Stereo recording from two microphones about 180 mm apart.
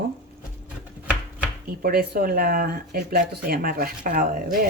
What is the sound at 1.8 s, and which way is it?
Speech, 55° right (ahead or behind).